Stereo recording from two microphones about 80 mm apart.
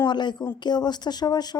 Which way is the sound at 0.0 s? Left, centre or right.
Left.